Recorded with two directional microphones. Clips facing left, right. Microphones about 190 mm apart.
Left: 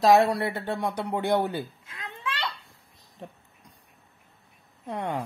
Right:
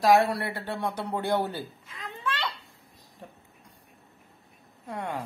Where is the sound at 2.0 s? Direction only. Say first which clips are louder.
Right 1 dB; centre (ahead or behind).